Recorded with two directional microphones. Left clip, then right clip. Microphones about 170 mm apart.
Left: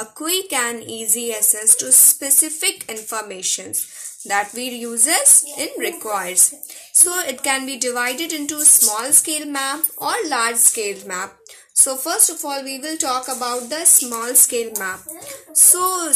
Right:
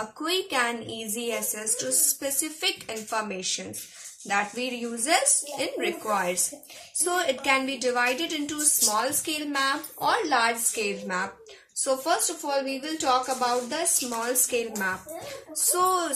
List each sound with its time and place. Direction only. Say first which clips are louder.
0.2 s a woman's voice: left 4 dB; 45° left (ahead or behind)